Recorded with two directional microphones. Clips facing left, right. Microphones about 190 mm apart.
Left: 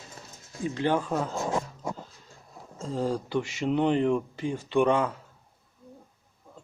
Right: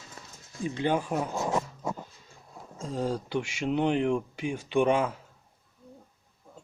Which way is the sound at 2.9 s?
5° right (ahead or behind).